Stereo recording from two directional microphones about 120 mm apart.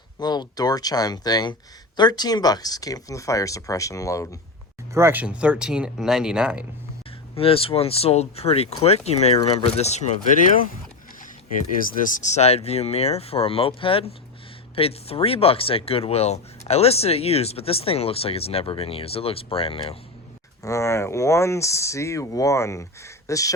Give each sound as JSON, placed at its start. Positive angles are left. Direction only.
{"t": 0.2, "sound": "speech", "side_deg": 35}
{"t": 4.9, "sound": "speech", "side_deg": -20}
{"t": 5.2, "sound": "speech", "side_deg": -10}
{"t": 7.3, "sound": "speech", "side_deg": 50}
{"t": 12.0, "sound": "speech", "side_deg": 90}
{"t": 20.6, "sound": "speech", "side_deg": 25}